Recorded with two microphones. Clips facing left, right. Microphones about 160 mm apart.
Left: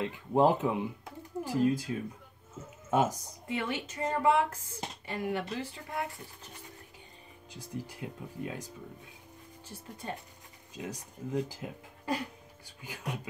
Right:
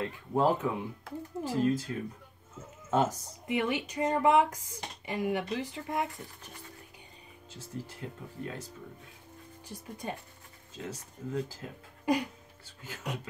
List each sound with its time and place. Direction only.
0.0 s speech: 20° left (ahead or behind)
2.9 s speech: 10° left (ahead or behind)
3.4 s speech: 15° right (ahead or behind)
7.5 s speech: 15° left (ahead or behind)
9.7 s speech: 15° right (ahead or behind)
10.7 s speech: 15° left (ahead or behind)
12.1 s speech: 15° right (ahead or behind)
12.8 s speech: 15° left (ahead or behind)